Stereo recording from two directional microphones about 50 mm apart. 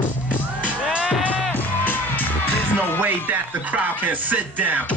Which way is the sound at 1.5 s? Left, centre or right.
Left.